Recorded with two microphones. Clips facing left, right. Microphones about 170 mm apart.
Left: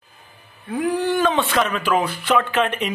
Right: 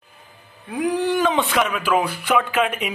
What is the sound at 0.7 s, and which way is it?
Speech, 15° right (ahead or behind).